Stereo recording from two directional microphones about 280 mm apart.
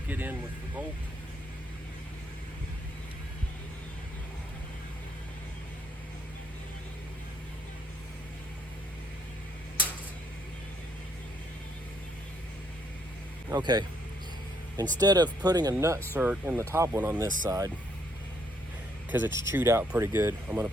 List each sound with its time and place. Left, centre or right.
0.1 s speech: centre
13.5 s speech: centre
14.9 s speech: centre
19.1 s speech: centre